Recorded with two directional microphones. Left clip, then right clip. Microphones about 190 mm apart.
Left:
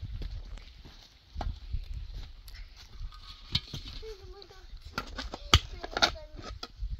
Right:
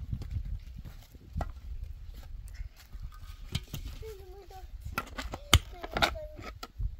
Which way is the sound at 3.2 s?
60° right (ahead or behind).